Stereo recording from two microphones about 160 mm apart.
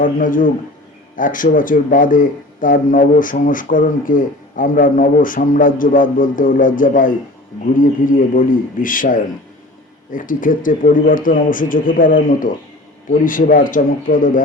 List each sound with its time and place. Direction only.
0.0 s speech: 55° left (ahead or behind)